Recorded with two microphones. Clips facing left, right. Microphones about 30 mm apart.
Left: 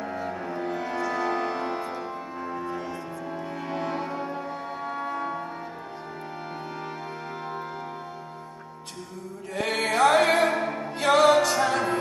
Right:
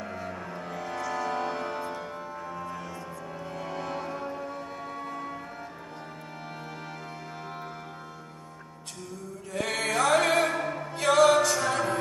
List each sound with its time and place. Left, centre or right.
0.0 s music: left
2.6 s music: left
9.5 s music: left